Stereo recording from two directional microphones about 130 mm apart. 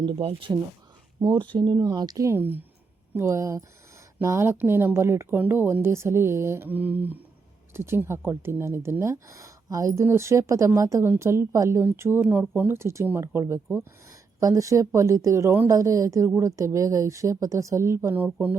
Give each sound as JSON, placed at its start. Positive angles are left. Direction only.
{"t": 0.2, "sound": "speech", "side_deg": -45}
{"t": 1.2, "sound": "speech", "side_deg": -35}